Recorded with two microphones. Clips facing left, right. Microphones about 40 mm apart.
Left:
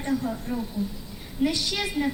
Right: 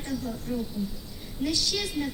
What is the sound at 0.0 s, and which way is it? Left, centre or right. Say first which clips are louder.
A woman's voice: left 5 dB; left.